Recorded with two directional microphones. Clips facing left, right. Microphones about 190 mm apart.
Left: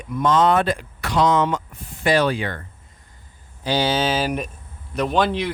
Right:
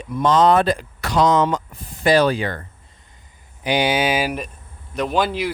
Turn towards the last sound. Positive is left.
turn(degrees=-5)  # may be behind; listen again after turning